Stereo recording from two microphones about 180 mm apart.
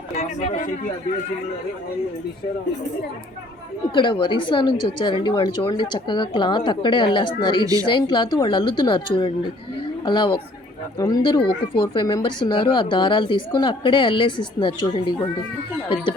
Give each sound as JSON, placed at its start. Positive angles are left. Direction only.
{"t": 0.2, "sound": "speech", "side_deg": 40}
{"t": 3.9, "sound": "speech", "side_deg": 25}